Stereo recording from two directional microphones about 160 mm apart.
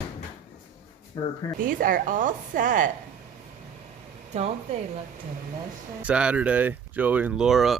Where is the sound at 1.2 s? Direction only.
25° left (ahead or behind).